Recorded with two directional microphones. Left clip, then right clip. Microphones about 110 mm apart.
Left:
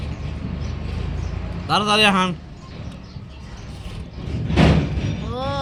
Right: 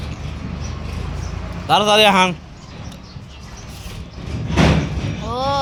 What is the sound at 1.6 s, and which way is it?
Speech, 45° left (ahead or behind).